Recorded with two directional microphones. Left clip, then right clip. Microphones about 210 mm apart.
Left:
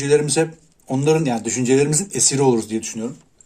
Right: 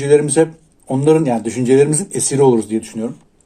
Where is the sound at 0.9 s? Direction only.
15° left (ahead or behind).